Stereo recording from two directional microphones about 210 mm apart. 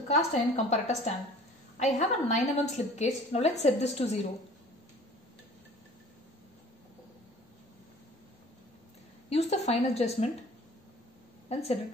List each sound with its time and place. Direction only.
0.1 s a woman's voice: 35° left (ahead or behind)
9.3 s a woman's voice: 30° left (ahead or behind)
11.4 s speech: 30° left (ahead or behind)